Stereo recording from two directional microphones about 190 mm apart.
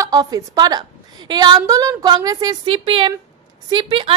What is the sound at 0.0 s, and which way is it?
A woman's voice, 20° right (ahead or behind).